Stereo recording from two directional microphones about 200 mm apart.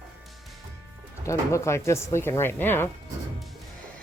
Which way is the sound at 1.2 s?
15° left (ahead or behind).